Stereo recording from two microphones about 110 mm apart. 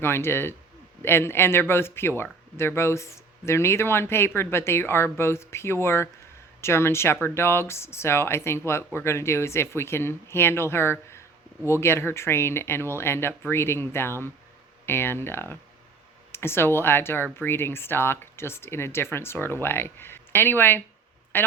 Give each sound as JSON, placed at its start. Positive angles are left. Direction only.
{"t": 0.0, "sound": "speech", "side_deg": 20}